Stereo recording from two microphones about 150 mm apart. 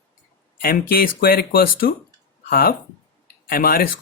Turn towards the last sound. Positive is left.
turn(degrees=80)